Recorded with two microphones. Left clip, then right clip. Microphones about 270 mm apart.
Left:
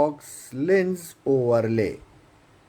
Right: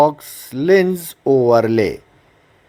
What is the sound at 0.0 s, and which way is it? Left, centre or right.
Speech, centre.